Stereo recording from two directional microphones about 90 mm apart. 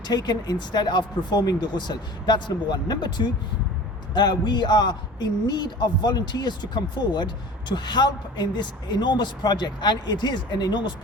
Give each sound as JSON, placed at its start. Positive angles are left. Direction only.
{"t": 0.1, "sound": "speech", "side_deg": 50}